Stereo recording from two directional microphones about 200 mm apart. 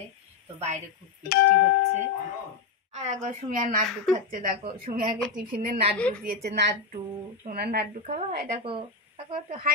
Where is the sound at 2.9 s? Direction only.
35° right (ahead or behind).